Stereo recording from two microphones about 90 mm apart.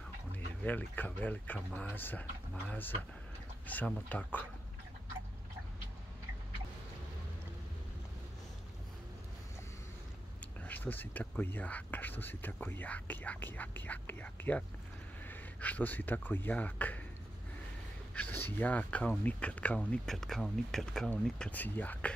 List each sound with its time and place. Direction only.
0.7 s speech: 20° left (ahead or behind)
10.6 s speech: 20° left (ahead or behind)
18.1 s speech: 20° left (ahead or behind)
20.1 s speech: 5° left (ahead or behind)
21.1 s speech: 20° left (ahead or behind)